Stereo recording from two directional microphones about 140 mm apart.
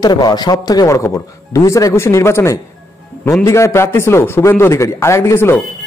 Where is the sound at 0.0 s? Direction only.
30° left (ahead or behind).